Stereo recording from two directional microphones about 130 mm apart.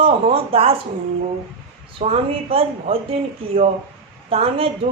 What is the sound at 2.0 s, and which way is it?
Speech, 50° right (ahead or behind).